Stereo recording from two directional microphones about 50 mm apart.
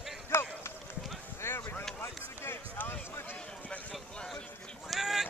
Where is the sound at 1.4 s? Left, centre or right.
Left.